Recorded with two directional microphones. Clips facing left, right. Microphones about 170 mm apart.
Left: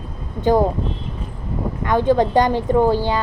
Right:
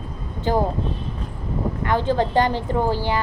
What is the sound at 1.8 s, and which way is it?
A woman's voice, 15° left (ahead or behind).